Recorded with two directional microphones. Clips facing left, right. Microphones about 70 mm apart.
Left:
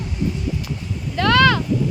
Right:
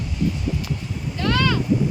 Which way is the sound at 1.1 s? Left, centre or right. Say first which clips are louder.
Left 6 dB; left.